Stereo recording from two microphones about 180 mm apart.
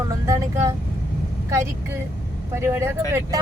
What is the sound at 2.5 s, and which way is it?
Speech, 15° right (ahead or behind).